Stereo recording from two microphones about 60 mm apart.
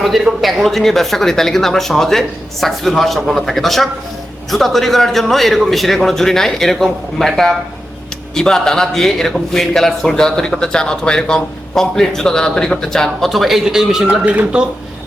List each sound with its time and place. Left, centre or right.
0.0 s a man's voice: centre
14.1 s speech: right